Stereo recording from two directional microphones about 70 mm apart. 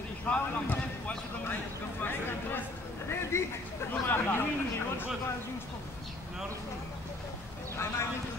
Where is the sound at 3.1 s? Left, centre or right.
Left.